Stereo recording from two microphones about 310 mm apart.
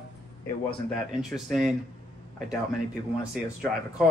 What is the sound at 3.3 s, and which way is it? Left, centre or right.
Speech, centre.